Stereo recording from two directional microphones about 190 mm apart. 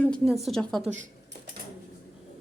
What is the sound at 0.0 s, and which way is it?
Speech, centre (ahead or behind).